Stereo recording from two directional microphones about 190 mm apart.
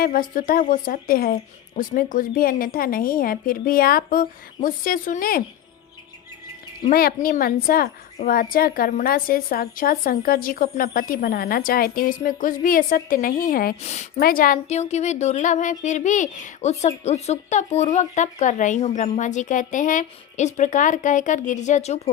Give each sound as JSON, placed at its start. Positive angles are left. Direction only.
{"t": 0.0, "sound": "a woman's voice", "side_deg": 45}
{"t": 6.9, "sound": "a woman's voice", "side_deg": 50}
{"t": 13.8, "sound": "a woman's voice", "side_deg": 35}
{"t": 14.2, "sound": "a woman's voice", "side_deg": 50}